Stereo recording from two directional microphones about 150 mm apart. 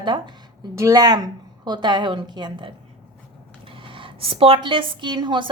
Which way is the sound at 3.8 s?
35° right (ahead or behind).